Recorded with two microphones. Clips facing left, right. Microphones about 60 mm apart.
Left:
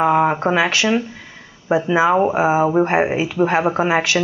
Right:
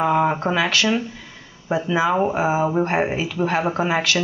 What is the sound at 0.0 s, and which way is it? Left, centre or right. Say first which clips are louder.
Speech: left 3 dB; centre.